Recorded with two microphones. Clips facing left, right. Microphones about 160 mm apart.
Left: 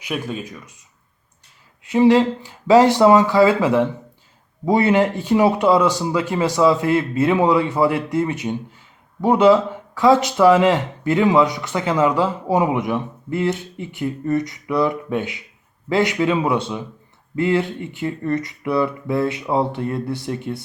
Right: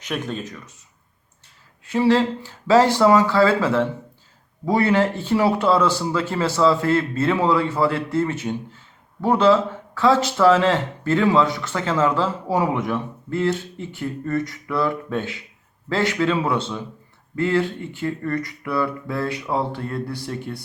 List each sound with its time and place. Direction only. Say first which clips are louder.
0.0 s speech: left 1 dB; 10° left (ahead or behind)
1.8 s speech: left 4 dB; 20° left (ahead or behind)